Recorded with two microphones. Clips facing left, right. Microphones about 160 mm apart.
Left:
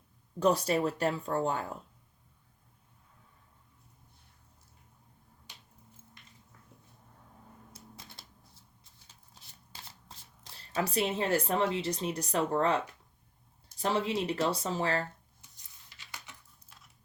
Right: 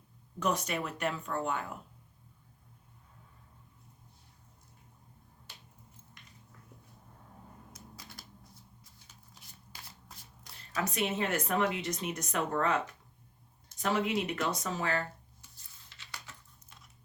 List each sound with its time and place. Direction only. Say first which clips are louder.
0.3 s speech: left 6 dB; 30° left (ahead or behind)
7.7 s typewriter: right 1 dB; 25° left (ahead or behind)
9.7 s speech: left 1 dB; 25° left (ahead or behind)
16.6 s a sound: right 1 dB; centre (ahead or behind)